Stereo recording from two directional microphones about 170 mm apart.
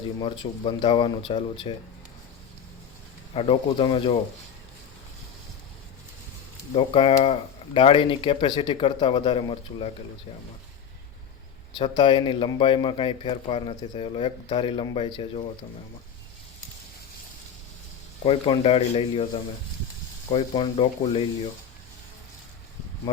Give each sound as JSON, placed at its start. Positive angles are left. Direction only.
{"t": 0.2, "sound": "a man's voice", "side_deg": 30}
{"t": 3.3, "sound": "a man's voice", "side_deg": 35}
{"t": 6.7, "sound": "a man's voice", "side_deg": 35}
{"t": 11.8, "sound": "a man's voice", "side_deg": 30}
{"t": 18.2, "sound": "a man's voice", "side_deg": 35}